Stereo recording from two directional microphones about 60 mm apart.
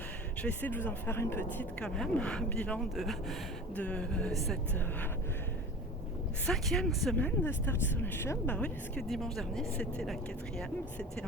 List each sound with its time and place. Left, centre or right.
0.6 s speech: left
1.8 s speech: centre
2.9 s speech: centre
3.8 s speech: left
4.3 s speech: centre
6.4 s speech: centre
7.2 s speech: left
8.4 s speech: left
9.0 s speech: centre